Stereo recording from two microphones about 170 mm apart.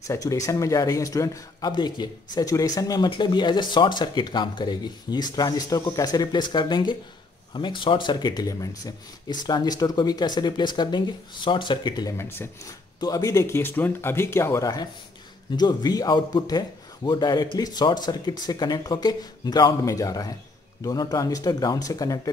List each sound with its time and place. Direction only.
0.1 s speech: 20° left (ahead or behind)
12.2 s speech: 15° left (ahead or behind)